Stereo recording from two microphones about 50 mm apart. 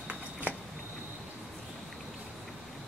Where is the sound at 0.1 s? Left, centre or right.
Right.